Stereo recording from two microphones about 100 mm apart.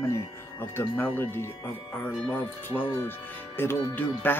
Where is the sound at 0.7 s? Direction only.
25° left (ahead or behind).